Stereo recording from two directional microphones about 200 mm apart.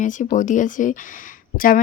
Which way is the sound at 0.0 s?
40° left (ahead or behind).